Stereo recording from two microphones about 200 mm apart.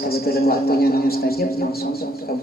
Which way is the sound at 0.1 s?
50° left (ahead or behind).